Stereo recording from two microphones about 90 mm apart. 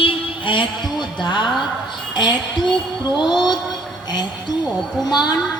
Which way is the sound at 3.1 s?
55° left (ahead or behind).